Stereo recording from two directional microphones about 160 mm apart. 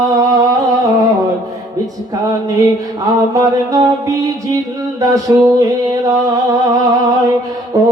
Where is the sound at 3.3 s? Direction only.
20° right (ahead or behind).